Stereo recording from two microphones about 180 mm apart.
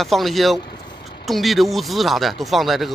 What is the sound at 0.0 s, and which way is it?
Speech, centre (ahead or behind).